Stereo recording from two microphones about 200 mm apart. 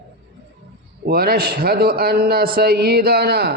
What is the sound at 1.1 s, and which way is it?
A man's voice, 50° right (ahead or behind).